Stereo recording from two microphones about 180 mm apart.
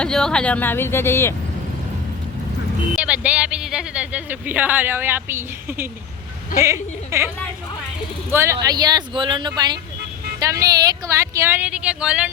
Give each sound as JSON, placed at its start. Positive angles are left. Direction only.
{"t": 0.0, "sound": "speech", "side_deg": 5}
{"t": 2.9, "sound": "speech", "side_deg": -5}
{"t": 8.3, "sound": "speech", "side_deg": -15}